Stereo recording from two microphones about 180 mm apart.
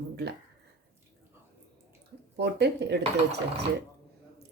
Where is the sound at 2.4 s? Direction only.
70° right (ahead or behind).